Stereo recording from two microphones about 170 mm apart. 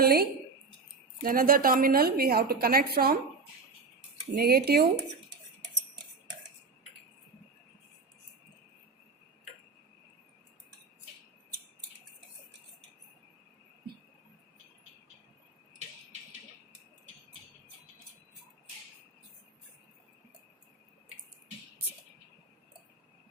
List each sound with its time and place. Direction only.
0.0 s a woman's voice: 65° right (ahead or behind)
4.4 s speech: 65° right (ahead or behind)